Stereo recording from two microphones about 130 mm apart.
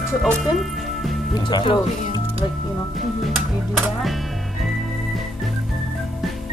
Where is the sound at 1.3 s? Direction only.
35° left (ahead or behind).